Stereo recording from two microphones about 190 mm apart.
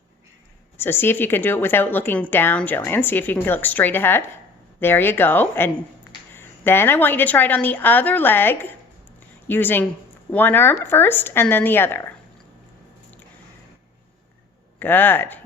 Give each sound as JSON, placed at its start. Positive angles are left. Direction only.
{"t": 0.8, "sound": "speech", "side_deg": 10}
{"t": 14.8, "sound": "speech", "side_deg": 10}